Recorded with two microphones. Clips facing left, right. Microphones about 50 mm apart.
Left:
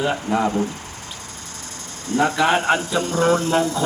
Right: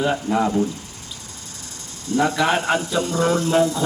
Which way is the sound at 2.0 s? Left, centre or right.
Left.